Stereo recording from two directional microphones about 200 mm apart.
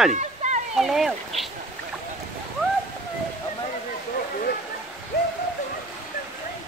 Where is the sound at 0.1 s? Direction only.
35° right (ahead or behind).